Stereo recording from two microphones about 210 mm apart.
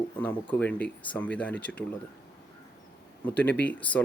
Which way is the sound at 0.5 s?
5° left (ahead or behind).